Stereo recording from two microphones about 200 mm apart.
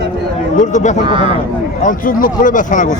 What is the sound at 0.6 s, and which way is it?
Speech, 35° left (ahead or behind).